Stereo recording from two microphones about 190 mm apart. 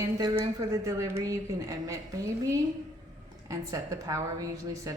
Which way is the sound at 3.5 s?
15° right (ahead or behind).